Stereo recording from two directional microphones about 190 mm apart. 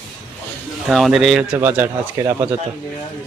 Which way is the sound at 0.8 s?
Centre (ahead or behind).